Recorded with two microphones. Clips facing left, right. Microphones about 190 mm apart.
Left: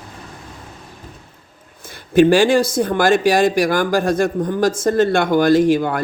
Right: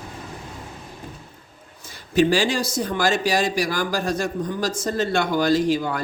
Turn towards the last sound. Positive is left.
turn(degrees=55)  # may be behind; listen again after turning